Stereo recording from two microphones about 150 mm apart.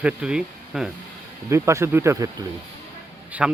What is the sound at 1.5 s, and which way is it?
Speech, 20° right (ahead or behind).